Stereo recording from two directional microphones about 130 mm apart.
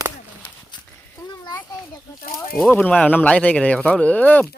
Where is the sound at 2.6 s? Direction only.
10° left (ahead or behind).